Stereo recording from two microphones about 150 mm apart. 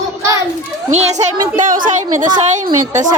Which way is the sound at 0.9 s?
50° right (ahead or behind).